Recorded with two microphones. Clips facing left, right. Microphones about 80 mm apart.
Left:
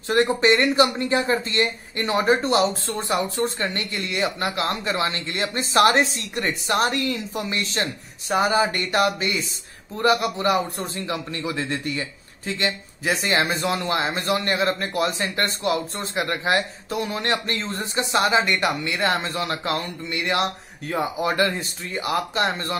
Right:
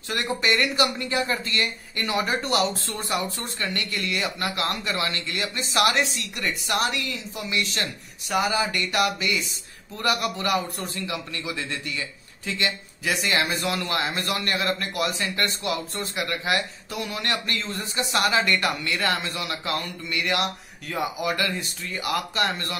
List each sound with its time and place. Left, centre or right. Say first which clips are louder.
0.1 s a man's voice: left 7 dB; left